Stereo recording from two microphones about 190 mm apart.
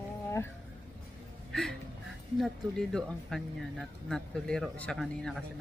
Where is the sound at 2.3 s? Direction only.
Centre (ahead or behind).